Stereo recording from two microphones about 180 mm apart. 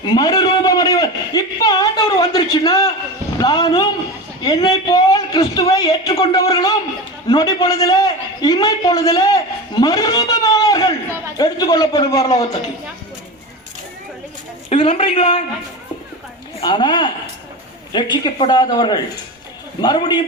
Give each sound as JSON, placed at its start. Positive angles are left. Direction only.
{"t": 0.0, "sound": "a man's voice", "side_deg": 20}
{"t": 14.7, "sound": "a woman's voice", "side_deg": 30}
{"t": 16.6, "sound": "a man's voice", "side_deg": 25}